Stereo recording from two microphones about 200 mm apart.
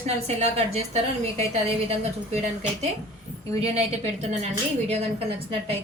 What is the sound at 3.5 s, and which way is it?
A woman's voice, 30° right (ahead or behind).